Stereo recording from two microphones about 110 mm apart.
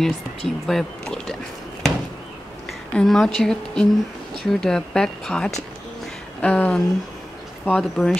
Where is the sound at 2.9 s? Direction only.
5° left (ahead or behind).